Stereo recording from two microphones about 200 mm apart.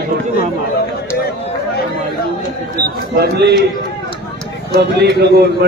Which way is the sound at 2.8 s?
55° right (ahead or behind).